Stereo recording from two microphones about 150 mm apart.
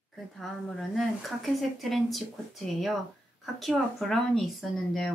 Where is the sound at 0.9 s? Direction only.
Centre (ahead or behind).